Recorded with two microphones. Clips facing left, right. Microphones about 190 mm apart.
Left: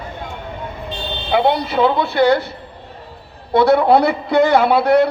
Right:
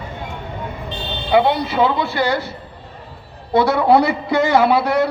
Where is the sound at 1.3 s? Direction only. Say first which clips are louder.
Even; 55° left (ahead or behind).